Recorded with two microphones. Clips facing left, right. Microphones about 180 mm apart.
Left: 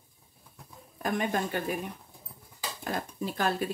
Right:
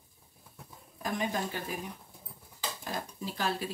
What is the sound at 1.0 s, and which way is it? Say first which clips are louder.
Speech: left 3 dB; 60° left (ahead or behind).